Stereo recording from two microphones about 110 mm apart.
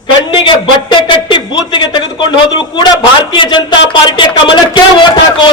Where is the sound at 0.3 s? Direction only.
45° left (ahead or behind).